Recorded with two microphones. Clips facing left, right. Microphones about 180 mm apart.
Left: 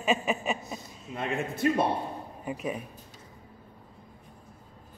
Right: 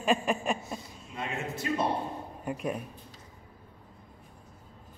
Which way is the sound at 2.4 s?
Centre (ahead or behind).